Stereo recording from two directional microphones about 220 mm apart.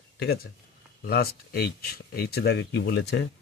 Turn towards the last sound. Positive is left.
turn(degrees=50)  # may be behind; listen again after turning